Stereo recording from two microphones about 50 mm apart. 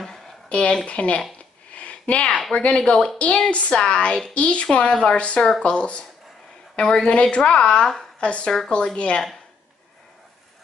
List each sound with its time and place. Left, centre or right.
0.5 s speech: left
1.7 s a sound: left
2.5 s speech: left
2.8 s speech: centre
3.4 s speech: left
7.1 s speech: left
8.5 s speech: centre